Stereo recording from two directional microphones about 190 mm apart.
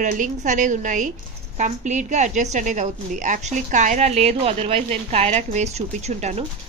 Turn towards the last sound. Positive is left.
turn(degrees=-35)  # may be behind; listen again after turning